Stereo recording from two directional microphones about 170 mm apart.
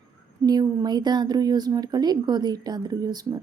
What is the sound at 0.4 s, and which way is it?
Speech, 25° right (ahead or behind).